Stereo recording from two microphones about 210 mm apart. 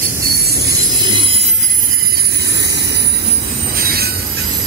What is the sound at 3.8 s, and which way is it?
Train, 45° right (ahead or behind).